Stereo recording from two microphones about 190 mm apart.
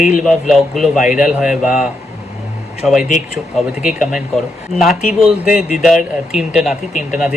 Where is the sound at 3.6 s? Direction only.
Centre (ahead or behind).